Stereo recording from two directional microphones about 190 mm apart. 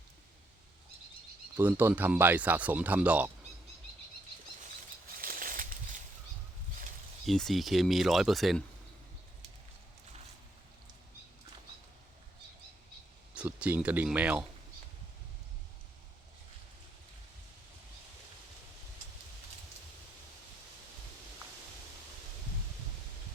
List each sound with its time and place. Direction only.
1.5 s speech: 10° right (ahead or behind)
5.2 s a sound: 50° right (ahead or behind)
7.3 s speech: centre (ahead or behind)
13.3 s speech: 5° right (ahead or behind)